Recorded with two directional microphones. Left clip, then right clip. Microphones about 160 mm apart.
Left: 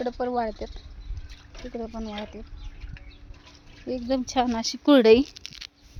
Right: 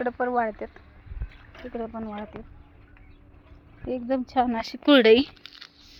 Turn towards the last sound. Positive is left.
turn(degrees=25)  # may be behind; listen again after turning